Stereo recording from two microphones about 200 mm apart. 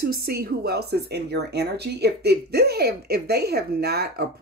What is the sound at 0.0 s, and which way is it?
Speech, 50° right (ahead or behind).